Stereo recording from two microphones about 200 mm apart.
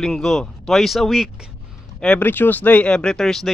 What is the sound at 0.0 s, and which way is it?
A man's voice, centre (ahead or behind).